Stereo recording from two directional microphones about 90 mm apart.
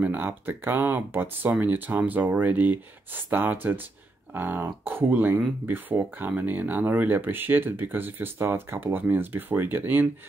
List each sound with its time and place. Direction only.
0.0 s speech: 20° right (ahead or behind)